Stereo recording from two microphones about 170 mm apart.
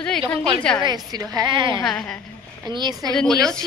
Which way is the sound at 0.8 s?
25° right (ahead or behind).